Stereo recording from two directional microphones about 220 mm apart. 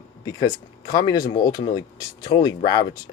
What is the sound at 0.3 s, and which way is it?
Speech, 15° left (ahead or behind).